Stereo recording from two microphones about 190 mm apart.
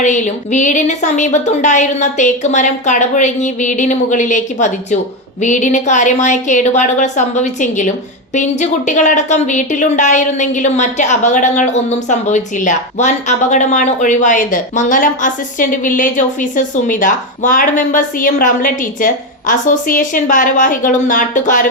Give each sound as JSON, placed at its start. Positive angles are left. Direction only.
{"t": 0.0, "sound": "a woman's voice", "side_deg": 40}